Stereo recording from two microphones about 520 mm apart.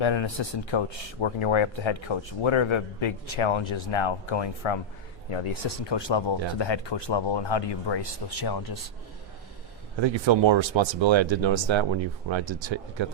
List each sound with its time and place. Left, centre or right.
0.0 s speech: left
10.0 s speech: right